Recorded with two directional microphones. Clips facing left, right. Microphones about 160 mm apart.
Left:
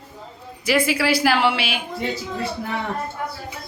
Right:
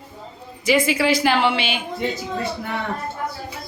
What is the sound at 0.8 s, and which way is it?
Speech, 5° left (ahead or behind).